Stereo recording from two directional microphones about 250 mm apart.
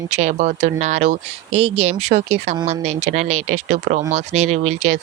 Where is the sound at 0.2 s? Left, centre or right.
Right.